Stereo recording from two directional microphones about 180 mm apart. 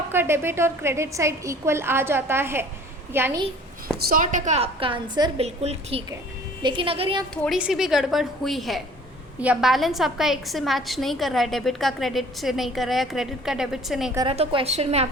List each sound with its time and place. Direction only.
0.1 s a woman's voice: 15° right (ahead or behind)
3.9 s a woman's voice: 50° right (ahead or behind); by 7.3 s 30° right (ahead or behind)
7.4 s a woman's voice: centre (ahead or behind)
14.3 s a woman's voice: 30° right (ahead or behind)